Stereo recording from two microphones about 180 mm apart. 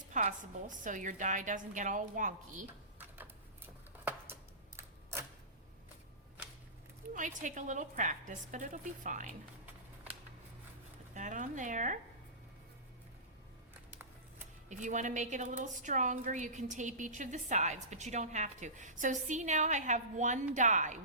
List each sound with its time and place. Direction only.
0.1 s a woman's voice: 45° right (ahead or behind)
7.1 s a woman's voice: 45° right (ahead or behind)
11.1 s a woman's voice: 45° right (ahead or behind)
14.7 s a woman's voice: 45° right (ahead or behind)